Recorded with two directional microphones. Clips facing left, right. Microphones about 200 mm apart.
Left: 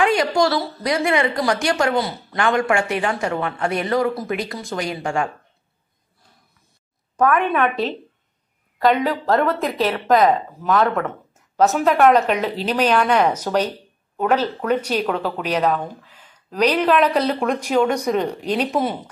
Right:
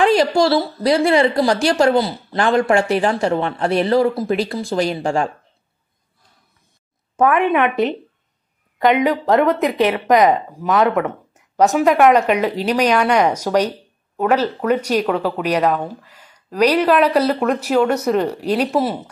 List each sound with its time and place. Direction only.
0.0 s a woman's voice: 35° right (ahead or behind)
7.2 s a woman's voice: 25° right (ahead or behind)
9.0 s speech: 20° right (ahead or behind); by 19.0 s centre (ahead or behind)